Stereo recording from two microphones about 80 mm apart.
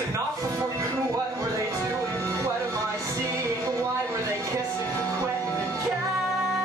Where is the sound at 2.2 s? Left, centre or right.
Right.